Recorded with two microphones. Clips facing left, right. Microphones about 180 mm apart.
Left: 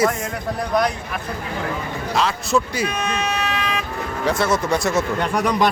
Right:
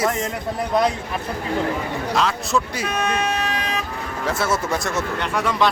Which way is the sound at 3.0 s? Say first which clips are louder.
Right 1 dB; 55° right (ahead or behind).